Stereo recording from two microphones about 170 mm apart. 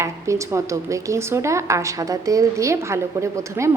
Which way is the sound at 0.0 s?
15° right (ahead or behind).